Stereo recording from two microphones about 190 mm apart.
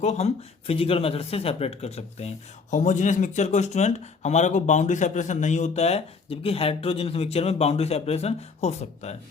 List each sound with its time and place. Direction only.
0.0 s speech: 35° left (ahead or behind)